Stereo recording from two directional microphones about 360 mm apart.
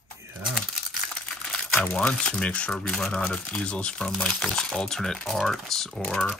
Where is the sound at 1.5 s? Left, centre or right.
Centre.